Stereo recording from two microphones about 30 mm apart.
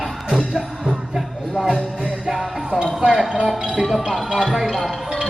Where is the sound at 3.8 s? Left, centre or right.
Centre.